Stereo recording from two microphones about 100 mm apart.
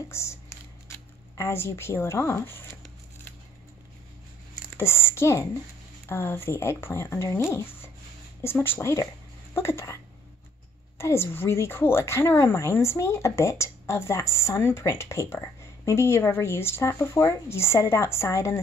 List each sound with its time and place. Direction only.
0.1 s a woman's voice: 30° left (ahead or behind)
4.7 s a woman's voice: 25° left (ahead or behind)
11.0 s a woman's voice: 25° left (ahead or behind)